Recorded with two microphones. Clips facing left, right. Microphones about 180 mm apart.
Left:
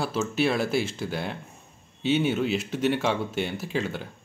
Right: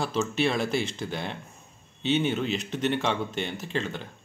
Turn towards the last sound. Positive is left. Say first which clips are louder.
# left 2 dB
turn(degrees=10)  # may be behind; listen again after turning